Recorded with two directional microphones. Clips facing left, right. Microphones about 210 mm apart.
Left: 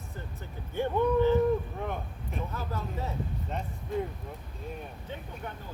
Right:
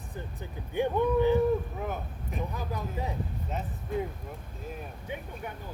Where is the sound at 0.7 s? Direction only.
15° right (ahead or behind).